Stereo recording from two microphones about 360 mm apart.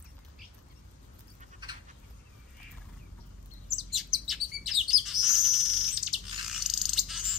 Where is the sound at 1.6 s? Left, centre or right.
Centre.